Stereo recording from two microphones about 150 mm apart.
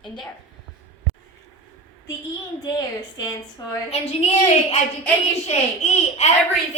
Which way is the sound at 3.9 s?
45° left (ahead or behind).